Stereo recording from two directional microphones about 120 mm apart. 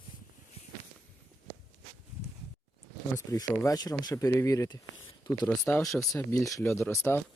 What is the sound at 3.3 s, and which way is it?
Speech, 30° left (ahead or behind).